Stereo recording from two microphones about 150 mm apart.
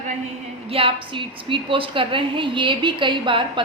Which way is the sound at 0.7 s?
35° right (ahead or behind).